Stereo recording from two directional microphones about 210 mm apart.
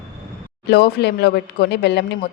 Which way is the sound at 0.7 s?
50° left (ahead or behind).